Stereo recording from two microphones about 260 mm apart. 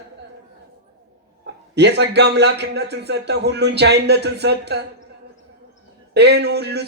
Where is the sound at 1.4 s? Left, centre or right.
Right.